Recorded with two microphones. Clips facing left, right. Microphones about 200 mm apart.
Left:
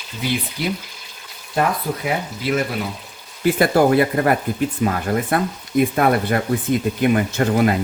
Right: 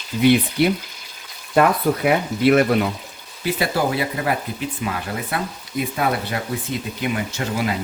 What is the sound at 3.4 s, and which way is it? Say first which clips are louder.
Speech: left 6 dB; 50° left (ahead or behind).